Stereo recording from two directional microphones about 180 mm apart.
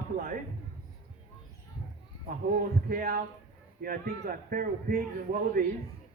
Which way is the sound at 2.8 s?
55° right (ahead or behind).